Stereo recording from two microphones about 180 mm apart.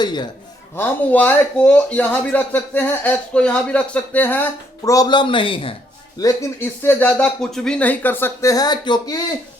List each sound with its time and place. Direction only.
0.0 s speech: 25° left (ahead or behind)
0.8 s speech: 10° left (ahead or behind)
4.8 s speech: 20° left (ahead or behind)
6.1 s speech: 15° left (ahead or behind)